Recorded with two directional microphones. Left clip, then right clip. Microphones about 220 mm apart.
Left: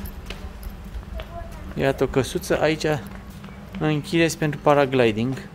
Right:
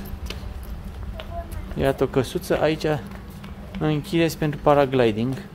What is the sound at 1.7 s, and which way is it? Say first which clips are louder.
Speech: even; 5° left (ahead or behind).